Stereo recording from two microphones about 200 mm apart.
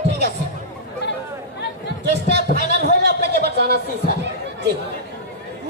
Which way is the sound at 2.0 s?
55° right (ahead or behind).